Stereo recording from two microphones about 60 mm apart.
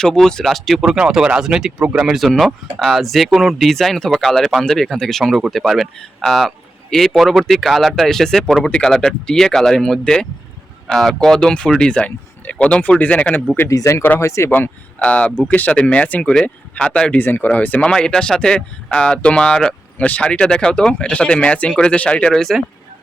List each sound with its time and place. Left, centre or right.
0.0 s speech: centre
0.9 s speech: centre
2.1 s speech: centre
3.7 s speech: centre; by 13.4 s left
13.7 s speech: left
14.5 s speech: left
15.0 s speech: centre
15.4 s speech: left
17.2 s speech: left; by 20.1 s centre
20.1 s speech: left
22.3 s speech: centre